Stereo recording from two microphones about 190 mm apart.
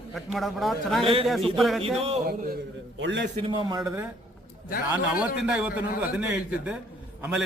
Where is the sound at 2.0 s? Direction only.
35° right (ahead or behind).